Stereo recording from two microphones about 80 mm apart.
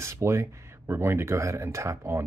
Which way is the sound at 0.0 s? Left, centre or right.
Right.